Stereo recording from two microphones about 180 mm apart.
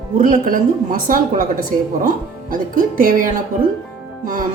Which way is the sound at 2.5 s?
50° right (ahead or behind).